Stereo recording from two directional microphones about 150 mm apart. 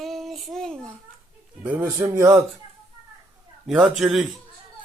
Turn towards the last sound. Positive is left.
turn(degrees=0)  # may be behind; listen again after turning